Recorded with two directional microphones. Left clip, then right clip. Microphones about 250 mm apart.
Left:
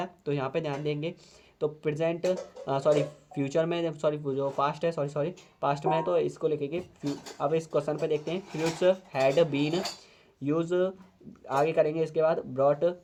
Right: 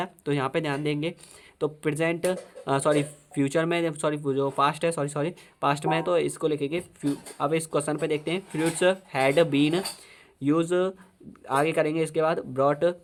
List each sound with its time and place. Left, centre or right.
0.0 s speech: right